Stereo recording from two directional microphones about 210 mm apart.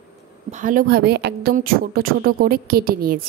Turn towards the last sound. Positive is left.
turn(degrees=-45)  # may be behind; listen again after turning